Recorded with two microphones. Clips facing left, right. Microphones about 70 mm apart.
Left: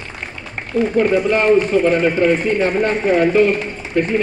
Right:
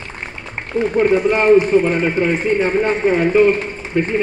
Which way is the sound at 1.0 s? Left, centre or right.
Right.